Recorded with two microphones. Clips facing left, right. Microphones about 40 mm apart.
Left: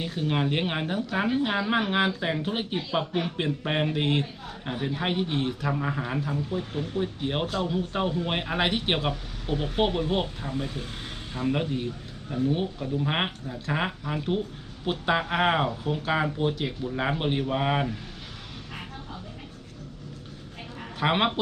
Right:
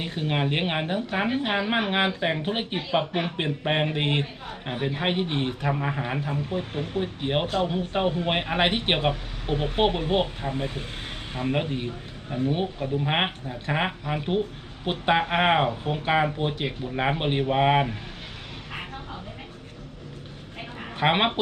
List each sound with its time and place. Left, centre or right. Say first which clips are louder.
0.0 s speech: even; right
21.0 s speech: right 2 dB; right